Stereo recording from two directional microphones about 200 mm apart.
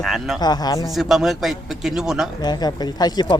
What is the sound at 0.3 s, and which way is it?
Speech, 20° left (ahead or behind).